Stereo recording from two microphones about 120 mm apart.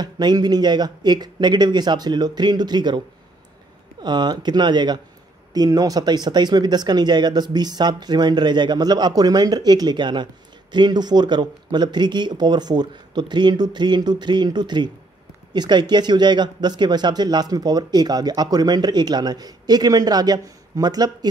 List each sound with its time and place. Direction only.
0.0 s speech: 35° right (ahead or behind)
4.0 s speech: 35° right (ahead or behind)